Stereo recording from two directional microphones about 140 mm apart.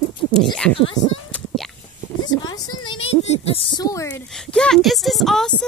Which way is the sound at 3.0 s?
45° left (ahead or behind).